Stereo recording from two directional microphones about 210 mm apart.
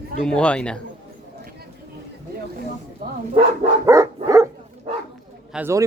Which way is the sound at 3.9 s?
15° right (ahead or behind).